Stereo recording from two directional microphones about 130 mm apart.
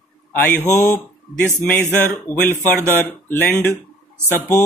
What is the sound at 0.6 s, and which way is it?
Speech, 25° left (ahead or behind).